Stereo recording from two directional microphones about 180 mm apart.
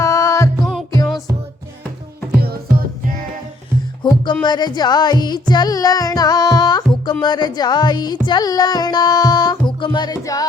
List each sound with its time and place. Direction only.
0.0 s music: 15° left (ahead or behind)
0.6 s music: centre (ahead or behind)
2.3 s music: 60° right (ahead or behind)
4.0 s music: 25° left (ahead or behind)